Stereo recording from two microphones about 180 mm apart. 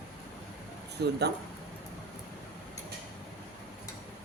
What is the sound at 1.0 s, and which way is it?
Speech, 65° right (ahead or behind).